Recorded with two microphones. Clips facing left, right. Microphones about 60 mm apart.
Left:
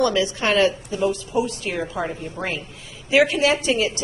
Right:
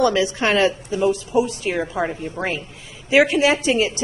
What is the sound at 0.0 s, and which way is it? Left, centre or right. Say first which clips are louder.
A woman's voice: right 2 dB; right.